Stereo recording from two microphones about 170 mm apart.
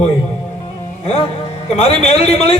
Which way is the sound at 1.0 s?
35° left (ahead or behind).